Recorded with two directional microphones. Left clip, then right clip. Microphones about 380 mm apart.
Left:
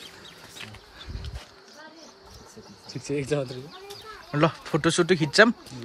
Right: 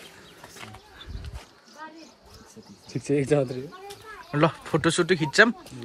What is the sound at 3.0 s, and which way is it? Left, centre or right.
Speech, centre.